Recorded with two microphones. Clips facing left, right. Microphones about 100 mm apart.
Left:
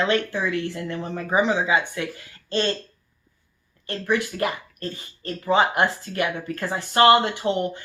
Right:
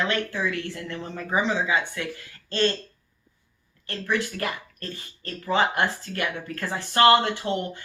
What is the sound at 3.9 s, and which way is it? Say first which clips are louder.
Speech: left 3 dB; 20° left (ahead or behind).